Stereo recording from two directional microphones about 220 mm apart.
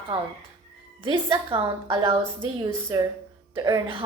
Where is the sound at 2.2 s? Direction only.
15° right (ahead or behind).